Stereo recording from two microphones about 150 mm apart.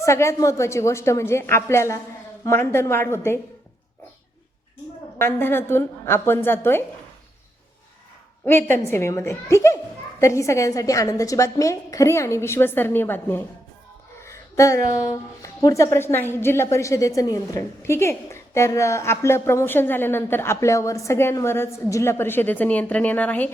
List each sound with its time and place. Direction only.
0.0 s a woman's voice: 20° left (ahead or behind)
5.1 s a woman's voice: 15° left (ahead or behind)
8.4 s a woman's voice: 15° left (ahead or behind)
14.2 s a sound: 20° left (ahead or behind)
15.4 s a woman's voice: 20° left (ahead or behind)